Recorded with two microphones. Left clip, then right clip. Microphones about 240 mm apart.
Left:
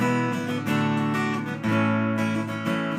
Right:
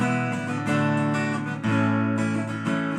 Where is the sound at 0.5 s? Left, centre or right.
Right.